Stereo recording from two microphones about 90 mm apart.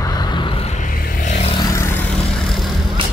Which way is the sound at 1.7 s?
30° left (ahead or behind).